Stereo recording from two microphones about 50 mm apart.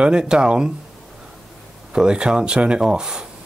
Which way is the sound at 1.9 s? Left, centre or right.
Centre.